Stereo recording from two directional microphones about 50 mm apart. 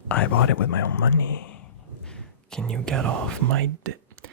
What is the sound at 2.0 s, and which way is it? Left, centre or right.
Speech, centre.